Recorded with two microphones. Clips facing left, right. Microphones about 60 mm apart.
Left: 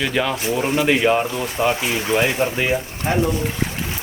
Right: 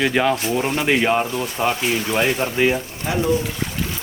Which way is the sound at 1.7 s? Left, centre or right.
Centre.